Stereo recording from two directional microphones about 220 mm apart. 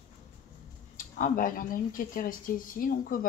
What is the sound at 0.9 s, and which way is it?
Speech, 35° left (ahead or behind).